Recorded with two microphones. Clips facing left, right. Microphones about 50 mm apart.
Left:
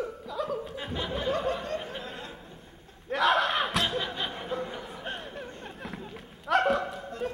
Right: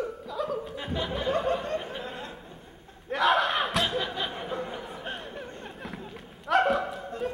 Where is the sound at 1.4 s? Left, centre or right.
Right.